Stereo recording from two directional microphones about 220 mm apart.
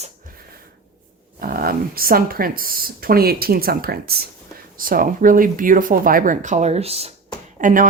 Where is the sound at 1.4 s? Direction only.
40° right (ahead or behind).